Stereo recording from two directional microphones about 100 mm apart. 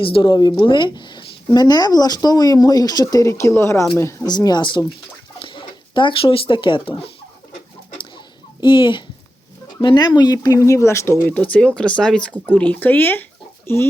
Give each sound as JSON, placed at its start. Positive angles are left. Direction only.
{"t": 0.0, "sound": "speech", "side_deg": 60}
{"t": 4.3, "sound": "speech", "side_deg": 45}
{"t": 8.6, "sound": "speech", "side_deg": 55}
{"t": 11.5, "sound": "speech", "side_deg": 10}